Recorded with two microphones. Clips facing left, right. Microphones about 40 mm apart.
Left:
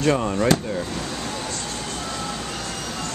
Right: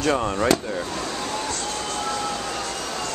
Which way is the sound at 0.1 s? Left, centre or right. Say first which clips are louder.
Left 1 dB; centre.